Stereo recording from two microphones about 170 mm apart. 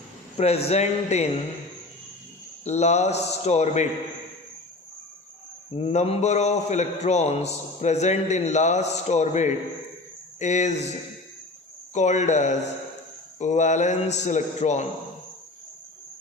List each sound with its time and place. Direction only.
0.3 s a man's voice: 40° left (ahead or behind)
2.6 s a man's voice: 40° left (ahead or behind)
5.7 s a man's voice: 40° left (ahead or behind)
11.9 s speech: 45° left (ahead or behind)